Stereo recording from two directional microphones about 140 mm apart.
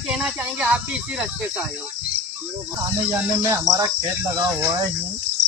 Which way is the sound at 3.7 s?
25° right (ahead or behind).